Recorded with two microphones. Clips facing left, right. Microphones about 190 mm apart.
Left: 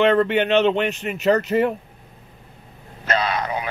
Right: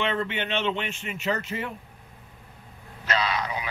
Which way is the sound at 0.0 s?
70° left (ahead or behind).